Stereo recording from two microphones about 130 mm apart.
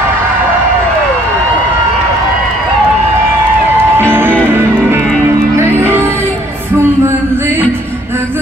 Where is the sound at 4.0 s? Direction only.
15° right (ahead or behind).